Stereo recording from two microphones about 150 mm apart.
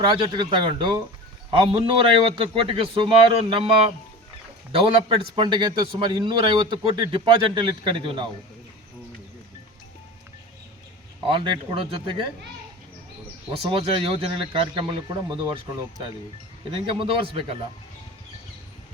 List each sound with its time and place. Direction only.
0.0 s a man's voice: 35° right (ahead or behind)
11.3 s a man's voice: 35° right (ahead or behind)
13.5 s a man's voice: 40° right (ahead or behind)
16.7 s a man's voice: 35° right (ahead or behind)